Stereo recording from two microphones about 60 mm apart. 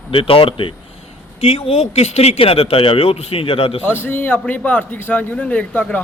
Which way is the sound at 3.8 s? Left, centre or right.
Left.